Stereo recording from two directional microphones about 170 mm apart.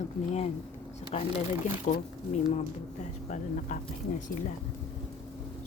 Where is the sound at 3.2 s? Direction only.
45° left (ahead or behind).